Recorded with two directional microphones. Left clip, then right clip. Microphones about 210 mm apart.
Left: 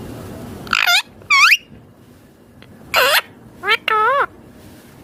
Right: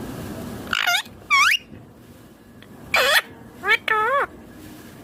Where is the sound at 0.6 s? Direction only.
30° left (ahead or behind).